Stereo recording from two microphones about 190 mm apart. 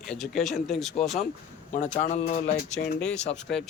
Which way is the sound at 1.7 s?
40° left (ahead or behind).